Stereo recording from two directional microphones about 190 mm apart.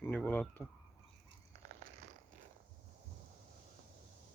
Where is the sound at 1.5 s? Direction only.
40° right (ahead or behind).